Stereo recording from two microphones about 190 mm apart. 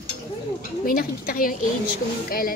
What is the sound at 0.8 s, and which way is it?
Speech, 50° left (ahead or behind).